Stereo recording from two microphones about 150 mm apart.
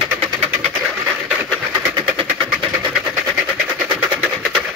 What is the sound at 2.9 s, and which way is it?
Vehicle, 5° right (ahead or behind).